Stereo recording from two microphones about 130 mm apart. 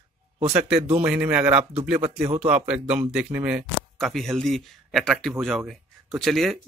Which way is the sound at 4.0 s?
Centre (ahead or behind).